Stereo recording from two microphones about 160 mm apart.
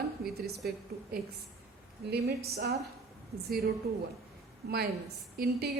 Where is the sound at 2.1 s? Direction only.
85° right.